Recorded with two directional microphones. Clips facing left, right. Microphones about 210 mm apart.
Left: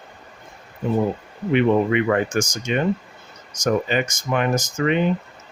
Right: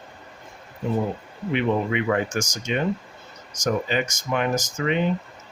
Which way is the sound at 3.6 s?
55° left (ahead or behind).